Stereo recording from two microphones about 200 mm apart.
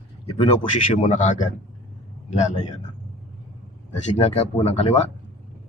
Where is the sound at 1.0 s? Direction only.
35° left (ahead or behind).